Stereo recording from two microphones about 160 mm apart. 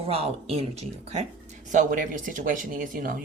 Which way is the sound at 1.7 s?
55° right (ahead or behind).